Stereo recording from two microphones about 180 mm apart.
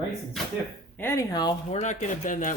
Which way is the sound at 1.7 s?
40° left (ahead or behind).